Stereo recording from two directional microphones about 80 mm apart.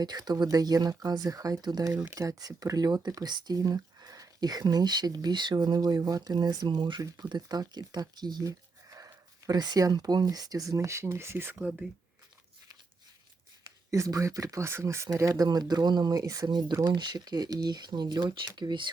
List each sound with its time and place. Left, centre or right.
0.0 s speech: right
7.4 s speech: right
8.9 s speech: right
13.9 s speech: right
15.4 s speech: right
16.5 s speech: right